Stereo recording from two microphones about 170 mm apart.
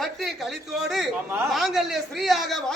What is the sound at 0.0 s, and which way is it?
A man's voice, centre (ahead or behind).